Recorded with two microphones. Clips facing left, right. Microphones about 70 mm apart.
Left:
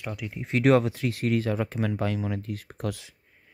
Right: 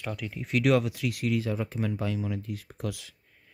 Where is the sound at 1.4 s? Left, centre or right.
Left.